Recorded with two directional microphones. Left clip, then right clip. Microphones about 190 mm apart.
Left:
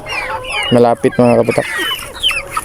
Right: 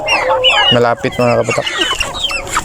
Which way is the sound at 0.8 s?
15° left (ahead or behind).